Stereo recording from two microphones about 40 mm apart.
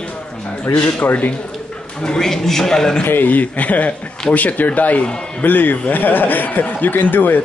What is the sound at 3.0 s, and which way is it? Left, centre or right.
Speech, left.